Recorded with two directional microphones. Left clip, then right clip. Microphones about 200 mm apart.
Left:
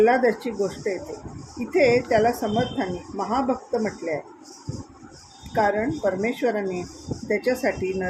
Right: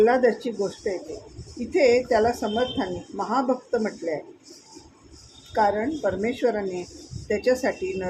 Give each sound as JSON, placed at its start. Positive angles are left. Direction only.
{"t": 0.0, "sound": "speech", "side_deg": 0}
{"t": 5.5, "sound": "speech", "side_deg": 5}